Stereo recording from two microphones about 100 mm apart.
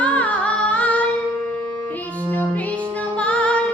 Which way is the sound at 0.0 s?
15° left (ahead or behind).